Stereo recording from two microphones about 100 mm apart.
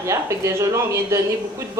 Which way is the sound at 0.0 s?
30° right (ahead or behind).